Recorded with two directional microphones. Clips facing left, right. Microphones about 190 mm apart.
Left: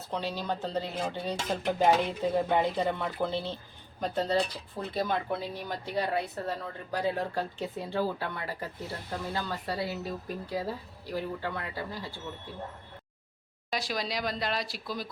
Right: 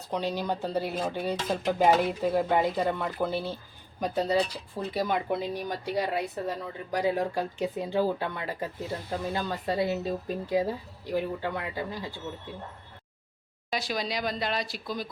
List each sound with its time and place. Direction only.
0.1 s a woman's voice: 15° right (ahead or behind)
13.7 s speech: centre (ahead or behind)